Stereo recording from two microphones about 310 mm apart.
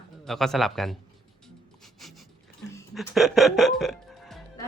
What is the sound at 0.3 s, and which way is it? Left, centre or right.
Speech, centre.